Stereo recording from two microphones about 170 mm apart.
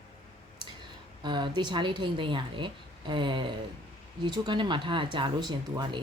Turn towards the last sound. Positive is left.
turn(degrees=-25)  # may be behind; listen again after turning